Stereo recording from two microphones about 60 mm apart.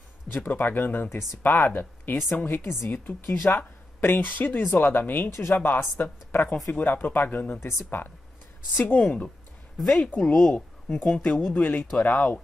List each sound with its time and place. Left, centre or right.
0.5 s a woman's voice: left
9.8 s speech: centre
10.5 s a woman's voice: left